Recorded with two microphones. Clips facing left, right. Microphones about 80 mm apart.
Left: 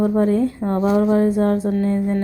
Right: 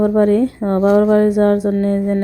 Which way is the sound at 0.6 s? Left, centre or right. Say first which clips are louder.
Right 6 dB; right.